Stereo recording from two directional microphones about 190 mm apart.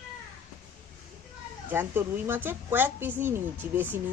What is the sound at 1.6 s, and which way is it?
Speech, 10° right (ahead or behind).